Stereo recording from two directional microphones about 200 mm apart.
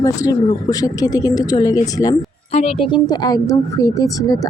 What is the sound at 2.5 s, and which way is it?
Speech, 30° left (ahead or behind).